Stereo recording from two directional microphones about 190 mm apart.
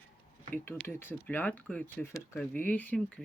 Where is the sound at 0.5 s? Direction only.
10° left (ahead or behind).